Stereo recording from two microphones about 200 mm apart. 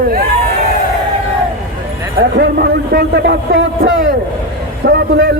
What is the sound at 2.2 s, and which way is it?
A man's voice, 55° right (ahead or behind).